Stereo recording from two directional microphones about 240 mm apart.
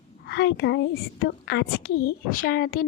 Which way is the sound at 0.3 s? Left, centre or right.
Left.